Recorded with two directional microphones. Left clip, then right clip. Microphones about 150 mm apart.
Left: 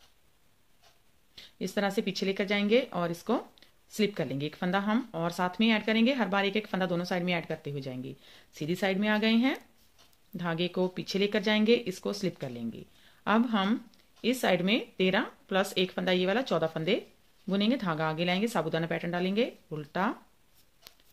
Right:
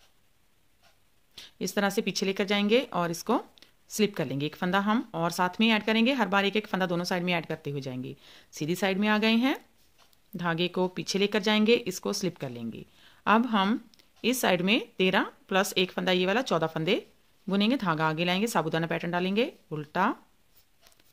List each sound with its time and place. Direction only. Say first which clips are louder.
1.3 s speech: right 2 dB; 40° right (ahead or behind)